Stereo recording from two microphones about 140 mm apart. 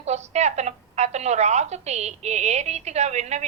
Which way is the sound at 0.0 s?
55° right (ahead or behind).